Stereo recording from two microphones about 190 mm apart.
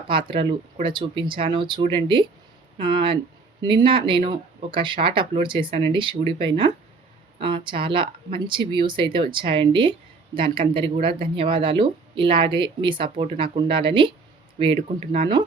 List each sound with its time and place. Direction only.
0.1 s speech: 25° right (ahead or behind)